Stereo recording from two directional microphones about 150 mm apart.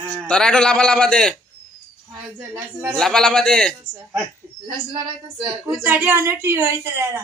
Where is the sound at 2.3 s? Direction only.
15° right (ahead or behind).